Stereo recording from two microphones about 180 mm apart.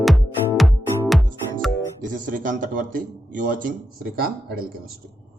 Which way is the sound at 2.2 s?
50° right (ahead or behind).